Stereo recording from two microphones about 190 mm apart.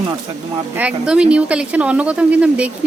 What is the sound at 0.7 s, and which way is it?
A woman's voice, 5° right (ahead or behind).